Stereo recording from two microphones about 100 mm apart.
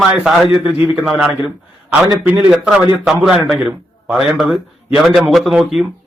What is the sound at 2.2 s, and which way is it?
A man's voice, 10° right (ahead or behind).